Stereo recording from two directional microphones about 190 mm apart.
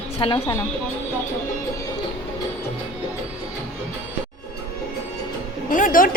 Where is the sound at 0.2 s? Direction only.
25° left (ahead or behind).